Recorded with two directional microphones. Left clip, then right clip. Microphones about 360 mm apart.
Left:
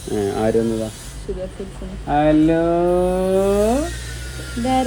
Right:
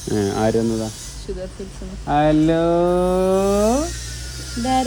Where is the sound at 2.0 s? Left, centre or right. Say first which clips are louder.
Left 1 dB; right.